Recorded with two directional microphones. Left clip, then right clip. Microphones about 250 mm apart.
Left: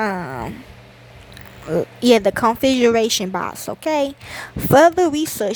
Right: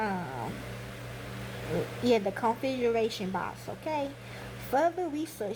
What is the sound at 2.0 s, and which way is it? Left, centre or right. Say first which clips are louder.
Speech: left 12 dB; left.